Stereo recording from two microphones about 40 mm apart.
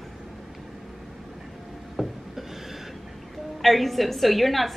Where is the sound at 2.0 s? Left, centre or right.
Centre.